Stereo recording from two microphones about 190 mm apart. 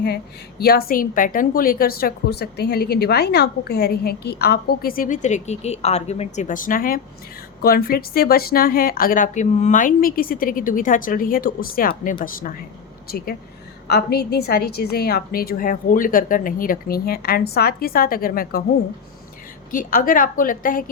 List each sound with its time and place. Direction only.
0.6 s a woman's voice: 55° left (ahead or behind)
19.7 s a woman's voice: 45° left (ahead or behind)